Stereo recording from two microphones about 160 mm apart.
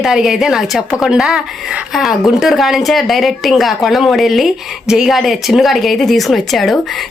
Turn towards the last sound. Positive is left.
turn(degrees=0)  # may be behind; listen again after turning